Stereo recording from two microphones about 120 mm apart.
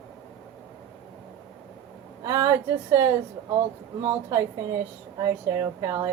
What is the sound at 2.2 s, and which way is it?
Speech, 25° right (ahead or behind).